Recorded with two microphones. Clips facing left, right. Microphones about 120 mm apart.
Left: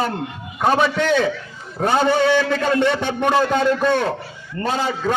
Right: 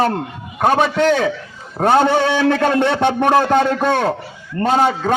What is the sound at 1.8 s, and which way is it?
Speech, 60° right (ahead or behind).